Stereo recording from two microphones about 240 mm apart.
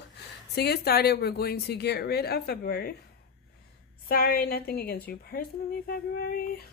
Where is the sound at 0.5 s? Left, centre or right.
Left.